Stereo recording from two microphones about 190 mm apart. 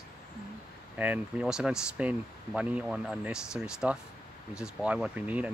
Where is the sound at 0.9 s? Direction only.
10° right (ahead or behind).